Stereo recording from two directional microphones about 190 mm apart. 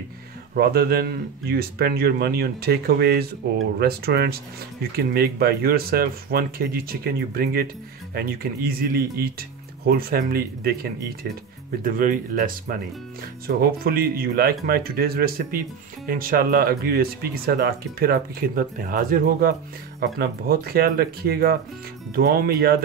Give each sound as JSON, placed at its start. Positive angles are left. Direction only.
{"t": 0.6, "sound": "speech", "side_deg": -55}